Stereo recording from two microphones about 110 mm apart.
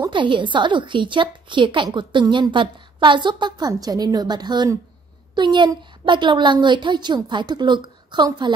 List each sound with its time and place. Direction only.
0.1 s a woman's voice: 45° right (ahead or behind)